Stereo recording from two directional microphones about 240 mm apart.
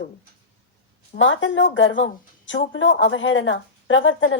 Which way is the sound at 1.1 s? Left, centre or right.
Left.